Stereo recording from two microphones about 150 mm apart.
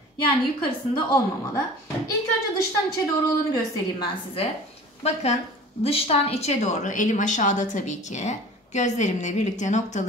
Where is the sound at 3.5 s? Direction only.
30° left (ahead or behind).